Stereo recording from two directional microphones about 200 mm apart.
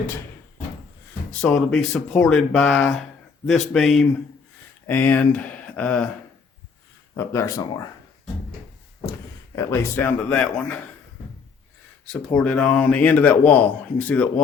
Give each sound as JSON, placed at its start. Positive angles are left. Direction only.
{"t": 1.3, "sound": "a man's voice", "side_deg": 5}
{"t": 7.2, "sound": "speech", "side_deg": 15}
{"t": 9.6, "sound": "speech", "side_deg": 15}
{"t": 12.0, "sound": "speech", "side_deg": 5}